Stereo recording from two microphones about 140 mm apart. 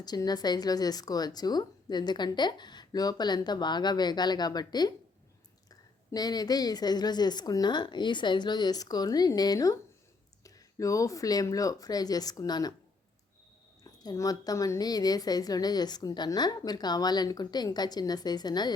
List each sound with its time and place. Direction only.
0.0 s speech: 30° left (ahead or behind)
6.1 s speech: 30° left (ahead or behind)
14.0 s speech: 25° left (ahead or behind)